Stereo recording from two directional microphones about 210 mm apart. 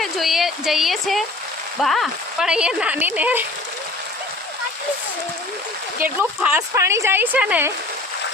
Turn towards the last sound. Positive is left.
turn(degrees=-5)  # may be behind; listen again after turning